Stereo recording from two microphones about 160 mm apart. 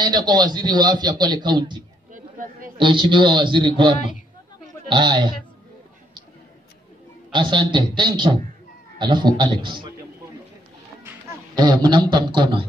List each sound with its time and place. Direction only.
0.0 s a man's voice: 25° right (ahead or behind)
2.1 s a sound: 55° right (ahead or behind)
2.8 s a man's voice: 30° right (ahead or behind)
7.3 s a man's voice: 30° right (ahead or behind)
11.1 s a man's voice: 20° right (ahead or behind)